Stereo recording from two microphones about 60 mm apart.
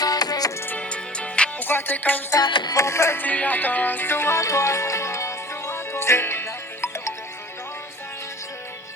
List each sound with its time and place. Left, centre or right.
0.0 s music: left
0.8 s music: centre
1.6 s music: left
2.3 s music: left
2.8 s music: left
3.2 s music: left